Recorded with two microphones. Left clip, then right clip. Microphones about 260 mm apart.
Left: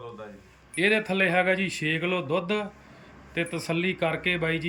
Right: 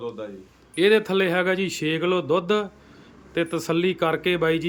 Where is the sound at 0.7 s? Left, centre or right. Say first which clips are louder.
Right 5 dB; centre.